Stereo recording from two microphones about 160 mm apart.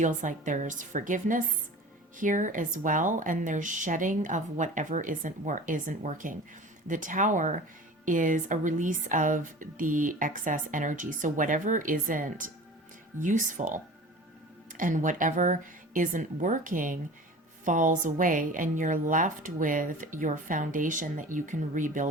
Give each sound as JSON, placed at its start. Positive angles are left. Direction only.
{"t": 0.0, "sound": "speech", "side_deg": -50}